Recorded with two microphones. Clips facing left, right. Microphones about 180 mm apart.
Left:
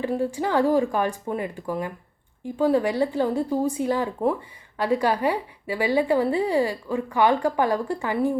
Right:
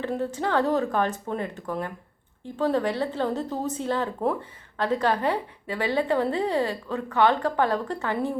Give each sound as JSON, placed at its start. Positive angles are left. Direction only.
{"t": 0.0, "sound": "a woman's voice", "side_deg": 10}